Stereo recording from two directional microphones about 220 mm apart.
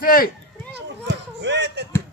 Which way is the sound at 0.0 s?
40° left (ahead or behind).